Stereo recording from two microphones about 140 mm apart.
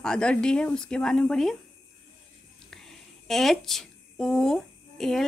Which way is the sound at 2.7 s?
5° left (ahead or behind).